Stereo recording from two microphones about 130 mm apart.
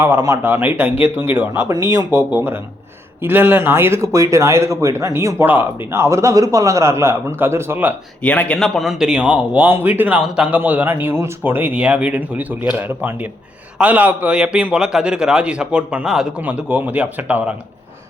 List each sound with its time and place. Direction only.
0.0 s a man's voice: 20° right (ahead or behind)
8.2 s a man's voice: 10° left (ahead or behind); by 17.5 s 10° right (ahead or behind)